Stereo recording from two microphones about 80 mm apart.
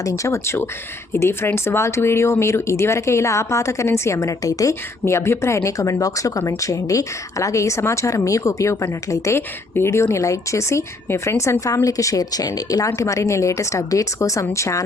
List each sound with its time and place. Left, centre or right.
0.0 s speech: left
4.7 s speech: left
13.0 s speech: left